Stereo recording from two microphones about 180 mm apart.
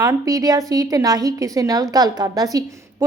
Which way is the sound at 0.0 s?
20° right (ahead or behind).